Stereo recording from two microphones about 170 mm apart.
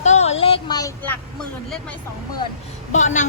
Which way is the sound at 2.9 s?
45° left (ahead or behind).